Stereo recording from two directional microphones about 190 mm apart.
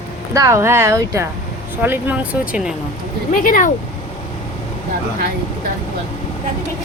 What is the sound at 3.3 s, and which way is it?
Speech, 45° left (ahead or behind).